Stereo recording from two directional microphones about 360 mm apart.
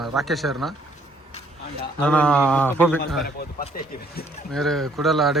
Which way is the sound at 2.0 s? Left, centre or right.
Centre.